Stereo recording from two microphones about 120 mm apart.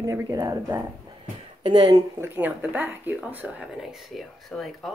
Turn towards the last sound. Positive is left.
turn(degrees=0)  # may be behind; listen again after turning